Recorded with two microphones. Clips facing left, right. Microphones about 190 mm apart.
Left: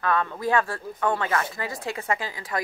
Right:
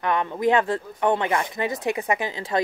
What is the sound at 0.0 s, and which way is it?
Speech, 20° right (ahead or behind).